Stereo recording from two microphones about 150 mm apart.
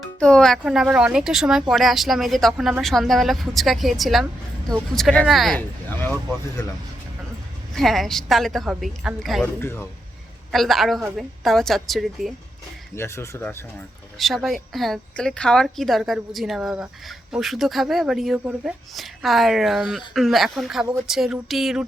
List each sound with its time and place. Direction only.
0.0 s speech: 5° left (ahead or behind)
5.5 s a sound: 10° left (ahead or behind)
7.8 s speech: centre (ahead or behind)
9.4 s speech: 15° left (ahead or behind)
10.5 s speech: centre (ahead or behind)
13.0 s speech: 20° left (ahead or behind)
14.2 s speech: centre (ahead or behind)